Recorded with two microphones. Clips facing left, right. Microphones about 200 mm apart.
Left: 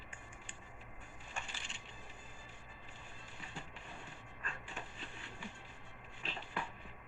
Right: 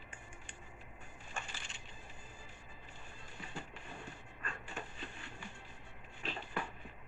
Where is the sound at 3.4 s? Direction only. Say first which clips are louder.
Right 4 dB; 45° right (ahead or behind).